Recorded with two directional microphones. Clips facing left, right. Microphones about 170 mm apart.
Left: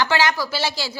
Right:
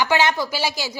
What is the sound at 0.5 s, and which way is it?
Speech, 15° right (ahead or behind).